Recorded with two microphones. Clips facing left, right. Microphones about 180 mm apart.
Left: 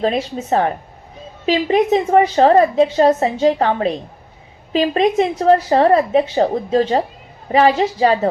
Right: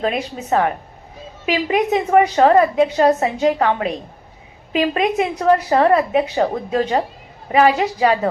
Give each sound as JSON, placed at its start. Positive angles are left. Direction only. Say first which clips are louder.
{"t": 0.0, "sound": "a woman's voice", "louder": "left 3 dB", "side_deg": 30}